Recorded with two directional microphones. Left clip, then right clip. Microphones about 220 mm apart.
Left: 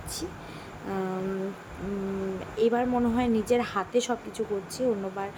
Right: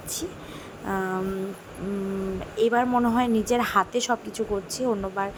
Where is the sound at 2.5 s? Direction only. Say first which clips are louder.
Right 3 dB; 10° right (ahead or behind).